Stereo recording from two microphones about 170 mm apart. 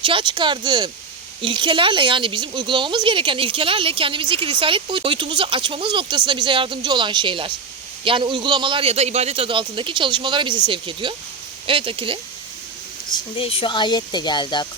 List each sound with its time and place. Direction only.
0.0 s speech: 30° right (ahead or behind)
13.1 s speech: 30° left (ahead or behind)